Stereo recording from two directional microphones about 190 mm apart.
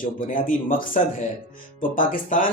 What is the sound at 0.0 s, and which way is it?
Speech, 45° left (ahead or behind).